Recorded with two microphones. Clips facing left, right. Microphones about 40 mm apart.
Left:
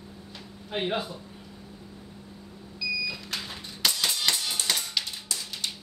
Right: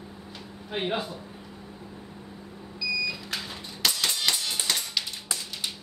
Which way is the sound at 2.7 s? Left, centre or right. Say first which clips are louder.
Right 1 dB; centre.